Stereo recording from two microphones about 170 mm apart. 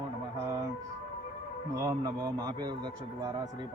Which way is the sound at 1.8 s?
20° right (ahead or behind).